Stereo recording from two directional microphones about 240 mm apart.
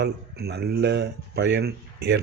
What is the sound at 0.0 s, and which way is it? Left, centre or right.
Speech, right.